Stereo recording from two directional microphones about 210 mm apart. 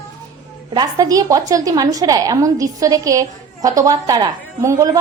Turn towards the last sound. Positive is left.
turn(degrees=-15)  # may be behind; listen again after turning